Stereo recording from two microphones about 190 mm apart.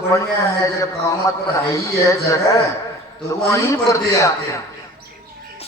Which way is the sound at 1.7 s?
15° left (ahead or behind).